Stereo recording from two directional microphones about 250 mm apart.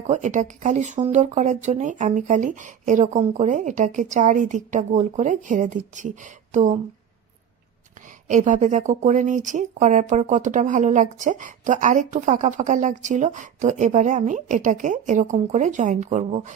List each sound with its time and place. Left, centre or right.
0.1 s speech: right
8.3 s speech: right